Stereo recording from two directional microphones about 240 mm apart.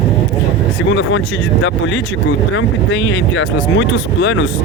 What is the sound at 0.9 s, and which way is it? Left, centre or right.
Speech, left.